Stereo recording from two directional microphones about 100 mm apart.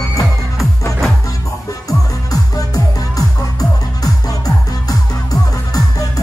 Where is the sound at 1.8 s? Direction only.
35° left (ahead or behind).